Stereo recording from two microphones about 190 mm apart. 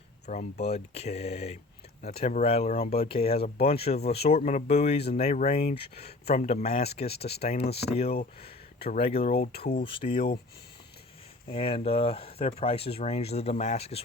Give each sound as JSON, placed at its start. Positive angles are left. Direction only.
{"t": 0.3, "sound": "speech", "side_deg": 35}
{"t": 9.2, "sound": "speech", "side_deg": 50}
{"t": 9.8, "sound": "speech", "side_deg": 30}
{"t": 11.4, "sound": "speech", "side_deg": 30}